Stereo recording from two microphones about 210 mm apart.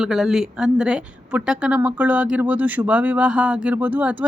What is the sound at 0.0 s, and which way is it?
A woman's voice, centre (ahead or behind).